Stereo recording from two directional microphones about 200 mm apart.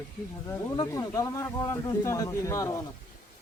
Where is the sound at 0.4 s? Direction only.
15° left (ahead or behind).